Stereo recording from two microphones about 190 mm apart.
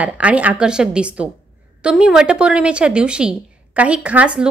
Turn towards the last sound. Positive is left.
turn(degrees=-5)  # may be behind; listen again after turning